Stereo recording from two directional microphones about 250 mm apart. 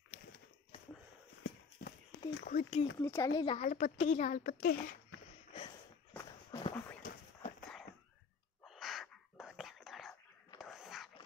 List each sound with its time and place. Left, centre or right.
2.4 s a woman's voice: left
3.0 s a woman's voice: centre; by 4.9 s left
6.1 s walk: centre
7.0 s a sound: left
8.6 s whispering: centre
10.6 s a sound: centre